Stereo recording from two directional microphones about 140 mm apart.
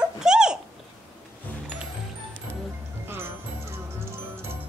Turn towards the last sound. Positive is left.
turn(degrees=-15)  # may be behind; listen again after turning